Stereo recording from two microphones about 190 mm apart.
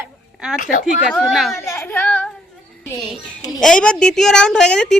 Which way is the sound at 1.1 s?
Centre (ahead or behind).